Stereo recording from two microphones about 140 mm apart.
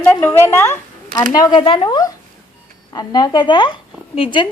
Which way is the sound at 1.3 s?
30° left (ahead or behind).